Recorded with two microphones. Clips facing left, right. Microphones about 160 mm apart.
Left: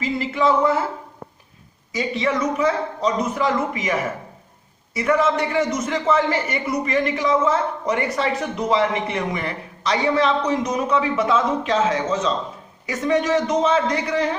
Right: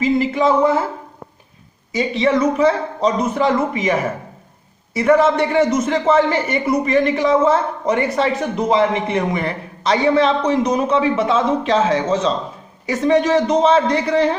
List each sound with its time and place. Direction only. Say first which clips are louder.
0.0 s speech: right 5 dB; 20° right (ahead or behind)
1.9 s a man's voice: right 5 dB; 25° right (ahead or behind)
5.1 s a man's voice: right 5 dB; 30° right (ahead or behind)